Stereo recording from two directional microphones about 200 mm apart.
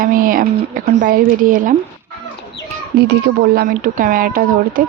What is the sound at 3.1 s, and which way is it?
Speech, 55° right (ahead or behind).